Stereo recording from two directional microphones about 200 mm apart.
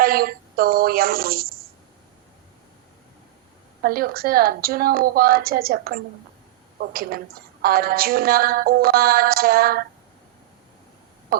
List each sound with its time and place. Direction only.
0.0 s music: 50° right (ahead or behind)
3.8 s music: 50° right (ahead or behind)